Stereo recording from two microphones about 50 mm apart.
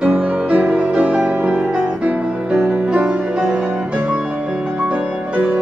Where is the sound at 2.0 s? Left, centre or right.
Right.